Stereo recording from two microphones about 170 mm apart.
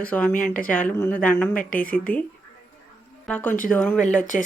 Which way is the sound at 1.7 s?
10° left (ahead or behind).